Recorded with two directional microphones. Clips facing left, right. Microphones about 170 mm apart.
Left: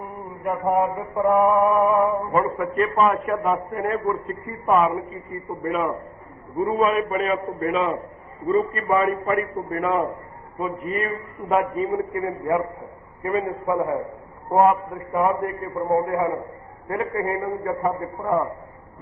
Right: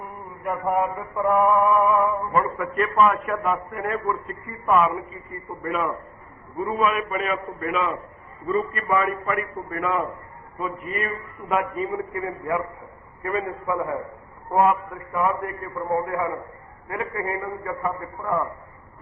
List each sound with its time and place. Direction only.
0.4 s music: 25° left (ahead or behind)
6.9 s a man's voice: 35° left (ahead or behind)
13.2 s music: 25° left (ahead or behind)
16.9 s a man's voice: 35° left (ahead or behind)